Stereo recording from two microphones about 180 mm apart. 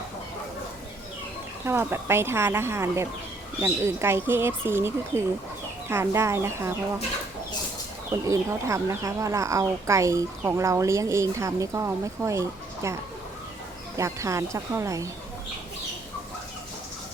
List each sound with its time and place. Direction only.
1.6 s speech: 10° right (ahead or behind)
8.1 s speech: 15° right (ahead or behind)